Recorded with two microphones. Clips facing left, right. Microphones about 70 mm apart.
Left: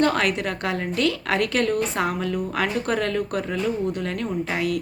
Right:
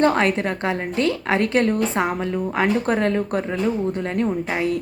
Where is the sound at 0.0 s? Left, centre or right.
Right.